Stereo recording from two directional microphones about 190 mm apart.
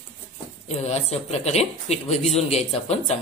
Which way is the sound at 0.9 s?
35° left (ahead or behind).